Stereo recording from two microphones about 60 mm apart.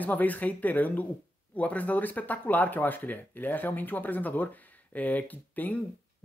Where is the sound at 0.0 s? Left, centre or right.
Left.